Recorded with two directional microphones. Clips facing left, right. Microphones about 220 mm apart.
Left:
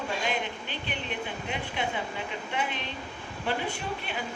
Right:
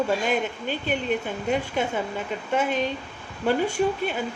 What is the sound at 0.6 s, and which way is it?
Speech, 45° right (ahead or behind).